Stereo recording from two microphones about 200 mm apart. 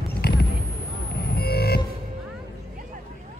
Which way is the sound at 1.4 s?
50° left (ahead or behind).